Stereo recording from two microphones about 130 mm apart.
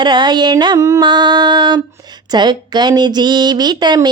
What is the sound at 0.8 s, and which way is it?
Music, 25° right (ahead or behind).